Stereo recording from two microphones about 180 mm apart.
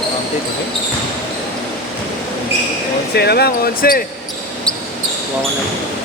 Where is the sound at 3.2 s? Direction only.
65° left (ahead or behind).